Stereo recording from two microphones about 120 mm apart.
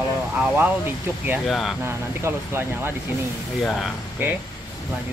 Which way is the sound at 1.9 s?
20° right (ahead or behind).